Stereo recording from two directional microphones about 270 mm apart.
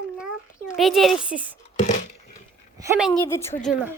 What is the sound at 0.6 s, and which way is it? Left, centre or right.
Speech, centre.